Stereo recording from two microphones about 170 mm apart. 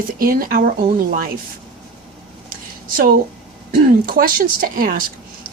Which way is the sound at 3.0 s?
55° right (ahead or behind).